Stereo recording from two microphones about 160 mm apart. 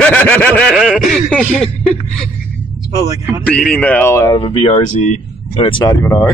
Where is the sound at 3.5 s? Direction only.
10° left (ahead or behind).